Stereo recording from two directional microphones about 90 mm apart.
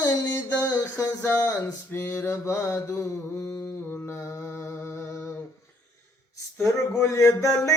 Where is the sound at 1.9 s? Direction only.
30° left (ahead or behind).